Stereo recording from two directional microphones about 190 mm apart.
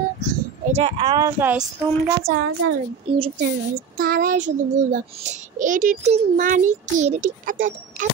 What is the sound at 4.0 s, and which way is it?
A child's voice, 50° right (ahead or behind).